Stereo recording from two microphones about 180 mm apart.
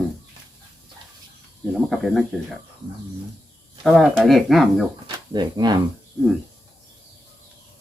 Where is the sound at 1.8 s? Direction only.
Centre (ahead or behind).